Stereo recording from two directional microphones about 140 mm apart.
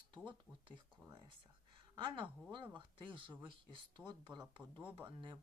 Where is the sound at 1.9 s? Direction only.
35° right (ahead or behind).